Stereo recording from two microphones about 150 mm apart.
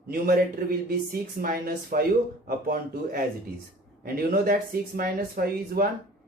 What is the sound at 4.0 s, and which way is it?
Speech, 90° right.